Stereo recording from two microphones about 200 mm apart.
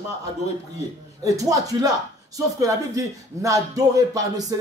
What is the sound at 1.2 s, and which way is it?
Speech, 15° right (ahead or behind).